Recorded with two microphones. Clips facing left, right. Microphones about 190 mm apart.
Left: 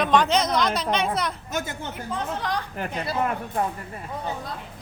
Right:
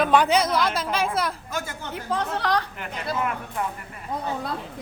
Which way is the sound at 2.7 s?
35° left (ahead or behind).